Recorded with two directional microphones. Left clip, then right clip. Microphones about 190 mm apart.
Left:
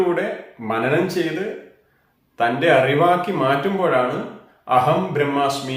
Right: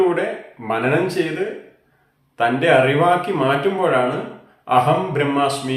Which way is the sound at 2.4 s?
5° right (ahead or behind).